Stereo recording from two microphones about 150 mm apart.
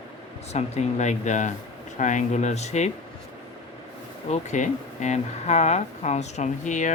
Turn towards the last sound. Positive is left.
turn(degrees=55)  # may be behind; listen again after turning